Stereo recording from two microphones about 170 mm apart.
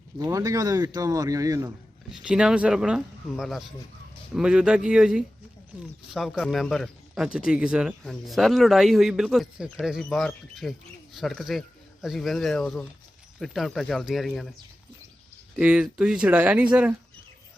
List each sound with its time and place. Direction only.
0.2 s speech: 20° right (ahead or behind)
2.2 s speech: 5° right (ahead or behind)
15.5 s speech: 5° right (ahead or behind)